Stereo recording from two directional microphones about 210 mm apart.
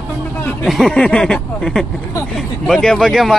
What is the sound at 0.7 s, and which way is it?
Speech, centre (ahead or behind).